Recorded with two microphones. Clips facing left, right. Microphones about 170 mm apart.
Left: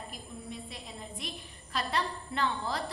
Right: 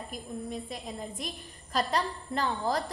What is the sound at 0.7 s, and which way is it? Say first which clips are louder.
A woman's voice: right 6 dB; 45° right (ahead or behind).